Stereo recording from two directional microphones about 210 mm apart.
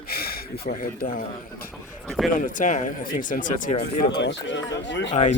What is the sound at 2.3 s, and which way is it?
Speech, 40° left (ahead or behind).